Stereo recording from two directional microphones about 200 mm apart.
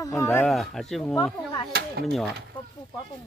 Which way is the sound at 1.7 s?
50° right (ahead or behind).